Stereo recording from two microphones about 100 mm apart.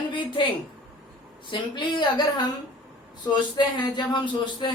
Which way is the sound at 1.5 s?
50° left (ahead or behind).